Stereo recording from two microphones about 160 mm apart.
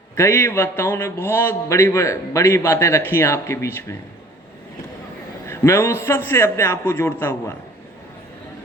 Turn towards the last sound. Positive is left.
turn(degrees=15)  # may be behind; listen again after turning